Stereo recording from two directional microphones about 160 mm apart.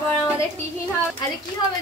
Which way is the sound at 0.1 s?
15° left (ahead or behind).